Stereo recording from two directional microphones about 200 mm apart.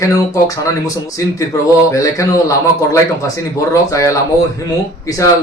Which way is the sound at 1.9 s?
15° left (ahead or behind).